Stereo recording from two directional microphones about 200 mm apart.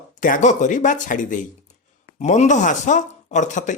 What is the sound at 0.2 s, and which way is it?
Speech, 40° left (ahead or behind).